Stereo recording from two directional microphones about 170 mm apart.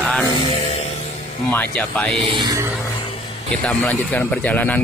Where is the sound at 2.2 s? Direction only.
30° right (ahead or behind).